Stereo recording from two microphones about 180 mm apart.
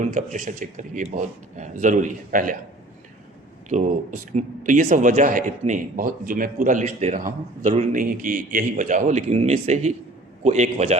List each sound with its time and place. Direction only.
0.0 s speech: 45° right (ahead or behind)
3.7 s a man's voice: 45° right (ahead or behind)